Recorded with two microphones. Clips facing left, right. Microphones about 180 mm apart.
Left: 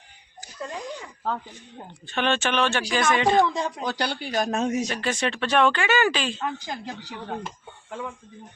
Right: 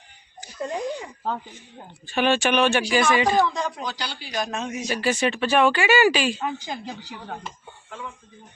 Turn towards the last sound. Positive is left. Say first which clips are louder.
# left 3 dB
turn(degrees=0)  # may be behind; listen again after turning